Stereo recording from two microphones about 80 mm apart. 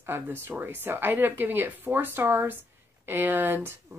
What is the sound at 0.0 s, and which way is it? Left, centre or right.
A woman's voice, right.